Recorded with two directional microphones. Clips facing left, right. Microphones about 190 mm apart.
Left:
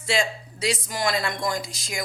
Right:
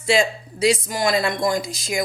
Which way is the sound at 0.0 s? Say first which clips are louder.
Right 6 dB; 15° right (ahead or behind).